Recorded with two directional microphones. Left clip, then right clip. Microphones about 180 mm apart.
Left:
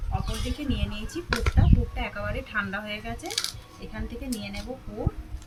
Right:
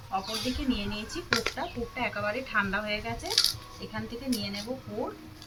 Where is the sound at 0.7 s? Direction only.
15° left (ahead or behind).